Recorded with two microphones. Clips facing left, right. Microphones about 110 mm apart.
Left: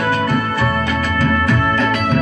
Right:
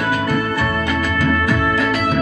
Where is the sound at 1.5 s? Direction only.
10° right (ahead or behind).